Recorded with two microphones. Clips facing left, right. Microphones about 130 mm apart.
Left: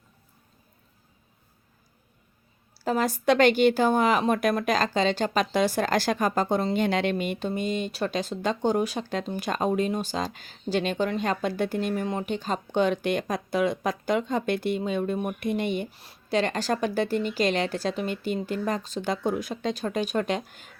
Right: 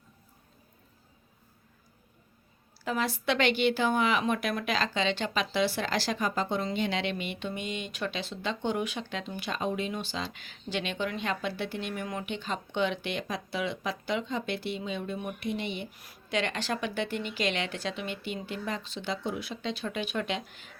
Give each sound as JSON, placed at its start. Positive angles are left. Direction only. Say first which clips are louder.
{"t": 2.7, "sound": "speech", "louder": "left 5 dB", "side_deg": 40}
{"t": 15.9, "sound": "speech", "louder": "left 6 dB", "side_deg": 30}